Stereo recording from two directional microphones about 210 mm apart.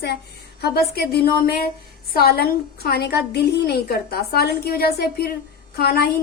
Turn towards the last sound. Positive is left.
turn(degrees=45)  # may be behind; listen again after turning